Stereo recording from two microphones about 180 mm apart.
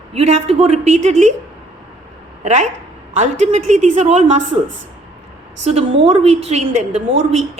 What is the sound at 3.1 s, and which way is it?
A woman's voice, 40° right (ahead or behind).